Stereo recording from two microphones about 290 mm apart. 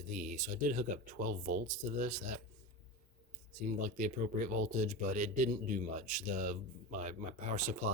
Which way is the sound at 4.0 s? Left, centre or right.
Right.